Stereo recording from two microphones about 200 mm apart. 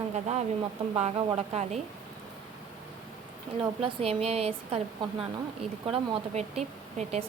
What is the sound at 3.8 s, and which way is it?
A woman's voice, 30° right (ahead or behind).